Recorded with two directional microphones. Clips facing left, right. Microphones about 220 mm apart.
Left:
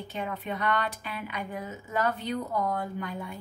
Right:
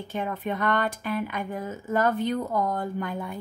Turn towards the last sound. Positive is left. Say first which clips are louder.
# right 4 dB
turn(degrees=-50)  # may be behind; listen again after turning